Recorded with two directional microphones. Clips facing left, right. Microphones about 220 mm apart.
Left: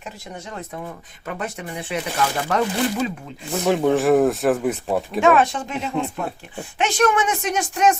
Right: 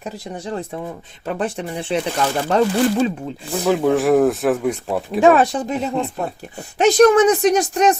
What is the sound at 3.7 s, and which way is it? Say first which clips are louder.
Speech: right 1 dB; centre (ahead or behind).